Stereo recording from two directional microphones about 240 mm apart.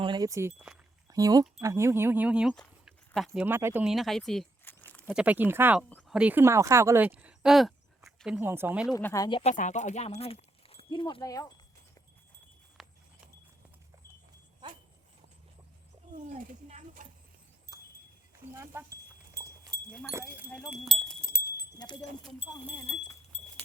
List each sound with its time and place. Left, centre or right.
0.0 s speech: centre
9.0 s speech: centre
9.4 s speech: left
12.8 s horse: centre
16.1 s a sound: right
17.7 s a sound: centre
19.3 s livestock: centre
20.1 s speech: centre
20.5 s wind chime: centre
21.6 s keys jangling: centre
23.3 s a sound: left